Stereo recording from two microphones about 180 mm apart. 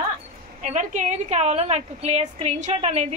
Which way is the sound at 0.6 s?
40° right (ahead or behind).